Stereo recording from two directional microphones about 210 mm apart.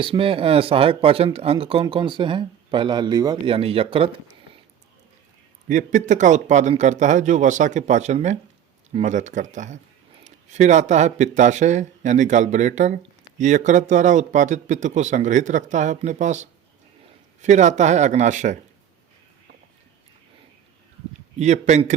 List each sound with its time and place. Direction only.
0.0 s speech: 25° right (ahead or behind)
5.6 s speech: 35° right (ahead or behind)
21.3 s speech: 35° right (ahead or behind)